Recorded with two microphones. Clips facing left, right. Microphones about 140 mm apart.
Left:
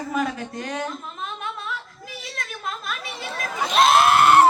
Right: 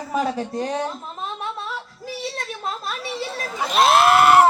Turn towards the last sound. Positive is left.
turn(degrees=-5)  # may be behind; listen again after turning